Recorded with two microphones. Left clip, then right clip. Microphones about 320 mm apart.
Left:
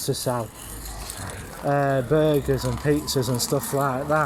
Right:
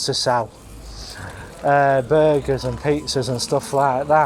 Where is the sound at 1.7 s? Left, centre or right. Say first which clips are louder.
Right 6 dB; right.